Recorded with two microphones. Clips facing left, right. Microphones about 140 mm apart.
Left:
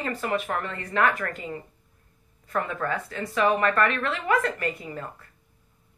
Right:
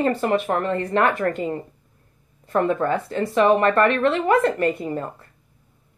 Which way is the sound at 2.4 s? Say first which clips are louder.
Right 8 dB; 30° right (ahead or behind).